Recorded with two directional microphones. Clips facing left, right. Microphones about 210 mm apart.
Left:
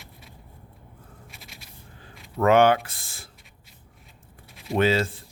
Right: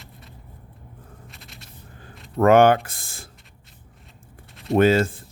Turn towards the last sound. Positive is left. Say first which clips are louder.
# right 5 dB
turn(degrees=-50)  # may be behind; listen again after turning